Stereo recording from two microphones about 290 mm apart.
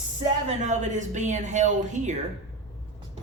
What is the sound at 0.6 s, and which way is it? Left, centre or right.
Speech, right.